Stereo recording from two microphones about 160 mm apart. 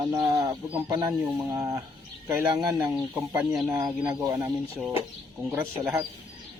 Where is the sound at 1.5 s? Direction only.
20° right (ahead or behind).